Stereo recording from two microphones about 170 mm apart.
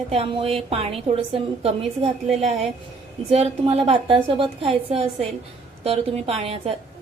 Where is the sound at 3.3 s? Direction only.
35° right (ahead or behind).